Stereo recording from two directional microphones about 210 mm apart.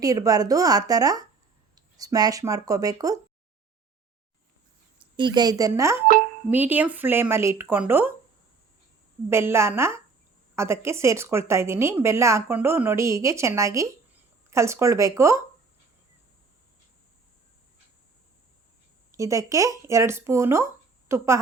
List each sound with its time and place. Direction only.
0.0 s a woman's voice: 15° right (ahead or behind)
5.1 s a woman's voice: 20° right (ahead or behind)
9.3 s a woman's voice: 10° right (ahead or behind)
19.1 s a woman's voice: 15° right (ahead or behind)